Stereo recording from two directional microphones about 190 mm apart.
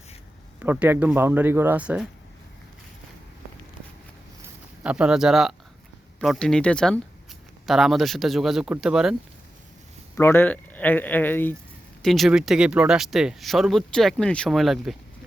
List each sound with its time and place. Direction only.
0.6 s speech: 10° right (ahead or behind)
4.8 s speech: 5° right (ahead or behind)
10.2 s speech: 10° left (ahead or behind)